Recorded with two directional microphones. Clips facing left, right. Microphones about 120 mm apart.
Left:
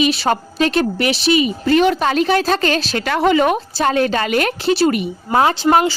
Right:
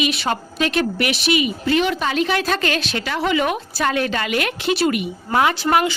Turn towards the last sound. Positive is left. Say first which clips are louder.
# left 4 dB
turn(degrees=30)  # may be behind; listen again after turning